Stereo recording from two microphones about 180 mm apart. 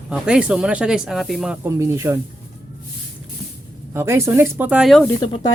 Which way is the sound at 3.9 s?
15° right (ahead or behind).